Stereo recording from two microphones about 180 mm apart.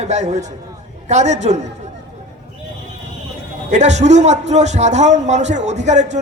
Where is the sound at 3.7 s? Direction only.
40° right (ahead or behind).